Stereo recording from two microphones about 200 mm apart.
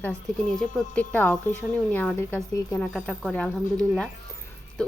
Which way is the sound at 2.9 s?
Centre (ahead or behind).